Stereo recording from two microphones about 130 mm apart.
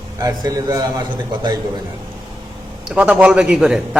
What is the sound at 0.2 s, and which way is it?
Speech, 30° right (ahead or behind).